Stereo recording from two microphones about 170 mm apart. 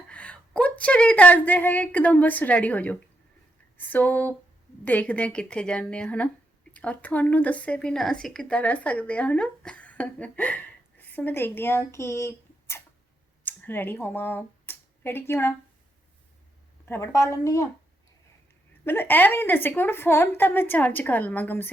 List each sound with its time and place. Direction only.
0.1 s speech: 5° left (ahead or behind)
16.8 s speech: 15° left (ahead or behind)
18.9 s speech: 10° left (ahead or behind)